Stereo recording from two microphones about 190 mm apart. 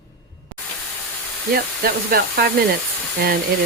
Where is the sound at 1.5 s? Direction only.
55° right (ahead or behind).